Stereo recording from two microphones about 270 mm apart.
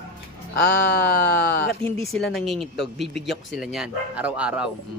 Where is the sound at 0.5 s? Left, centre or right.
Left.